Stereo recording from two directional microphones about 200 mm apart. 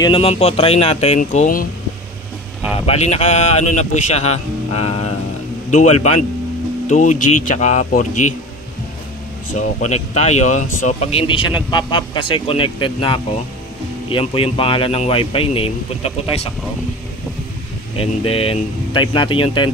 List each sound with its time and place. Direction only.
0.0 s speech: 25° left (ahead or behind)
2.9 s speech: 35° left (ahead or behind)
9.6 s speech: 35° left (ahead or behind)
17.9 s speech: 30° left (ahead or behind)